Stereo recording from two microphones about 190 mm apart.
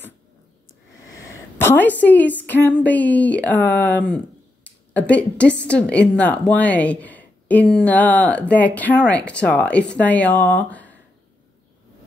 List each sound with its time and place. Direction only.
1.2 s a woman's voice: 10° left (ahead or behind)